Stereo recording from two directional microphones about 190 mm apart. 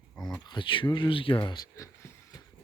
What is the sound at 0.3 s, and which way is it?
Speech, 20° left (ahead or behind).